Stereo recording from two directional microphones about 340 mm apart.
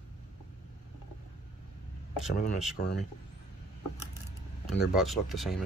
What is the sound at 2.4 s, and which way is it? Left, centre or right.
Speech, left.